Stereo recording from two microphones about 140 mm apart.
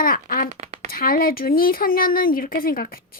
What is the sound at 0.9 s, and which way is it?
Speech, 90° left.